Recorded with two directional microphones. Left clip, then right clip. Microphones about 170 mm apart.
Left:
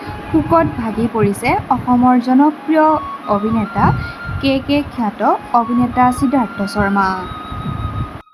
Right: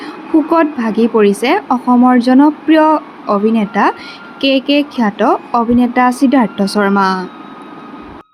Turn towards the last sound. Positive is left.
turn(degrees=-25)  # may be behind; listen again after turning